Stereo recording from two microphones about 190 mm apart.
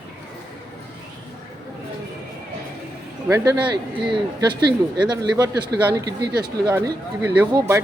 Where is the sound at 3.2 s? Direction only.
15° right (ahead or behind).